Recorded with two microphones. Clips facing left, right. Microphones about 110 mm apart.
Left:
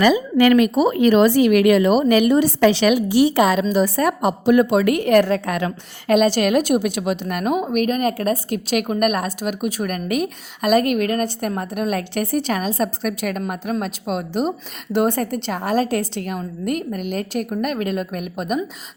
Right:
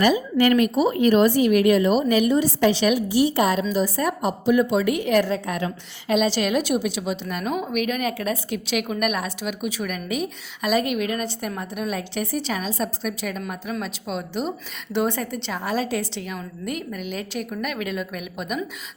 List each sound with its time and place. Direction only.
0.0 s a woman's voice: 90° left; by 7.6 s 60° left (ahead or behind)
7.6 s a woman's voice: 40° left (ahead or behind)